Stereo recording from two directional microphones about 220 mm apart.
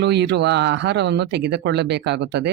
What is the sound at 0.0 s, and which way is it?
Speech, 50° right (ahead or behind).